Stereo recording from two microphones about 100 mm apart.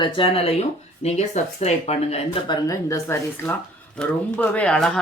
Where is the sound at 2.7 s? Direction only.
30° left (ahead or behind).